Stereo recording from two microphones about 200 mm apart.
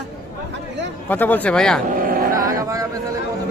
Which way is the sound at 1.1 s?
10° left (ahead or behind).